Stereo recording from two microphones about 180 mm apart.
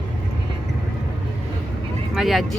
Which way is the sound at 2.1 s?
Centre (ahead or behind).